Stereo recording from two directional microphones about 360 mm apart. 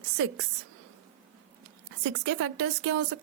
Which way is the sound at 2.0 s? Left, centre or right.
Right.